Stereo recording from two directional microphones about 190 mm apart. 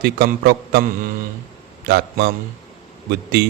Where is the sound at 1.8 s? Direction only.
60° right (ahead or behind).